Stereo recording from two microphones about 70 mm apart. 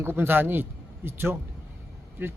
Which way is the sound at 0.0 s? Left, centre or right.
Right.